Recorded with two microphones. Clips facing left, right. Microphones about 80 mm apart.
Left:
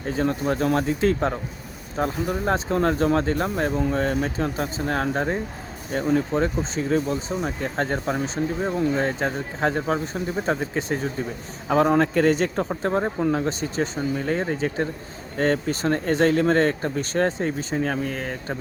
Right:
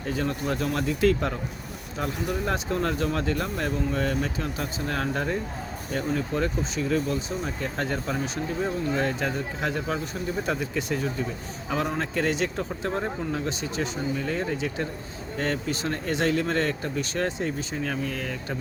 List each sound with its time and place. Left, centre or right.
0.0 s a man's voice: left